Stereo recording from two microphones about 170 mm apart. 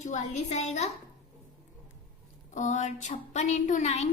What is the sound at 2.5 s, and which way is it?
A woman's voice, 45° left (ahead or behind).